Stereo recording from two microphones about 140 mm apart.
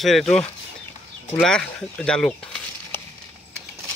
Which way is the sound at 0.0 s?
Centre (ahead or behind).